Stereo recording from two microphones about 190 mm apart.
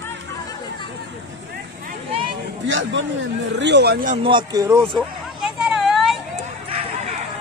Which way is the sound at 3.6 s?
65° right (ahead or behind).